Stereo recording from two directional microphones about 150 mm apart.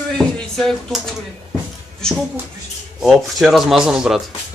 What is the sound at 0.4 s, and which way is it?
Speech, centre (ahead or behind).